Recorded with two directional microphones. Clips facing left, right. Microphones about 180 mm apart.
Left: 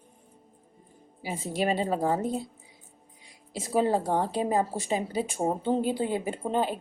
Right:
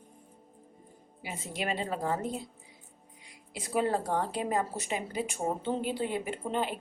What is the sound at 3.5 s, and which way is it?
A woman's voice, 30° left (ahead or behind).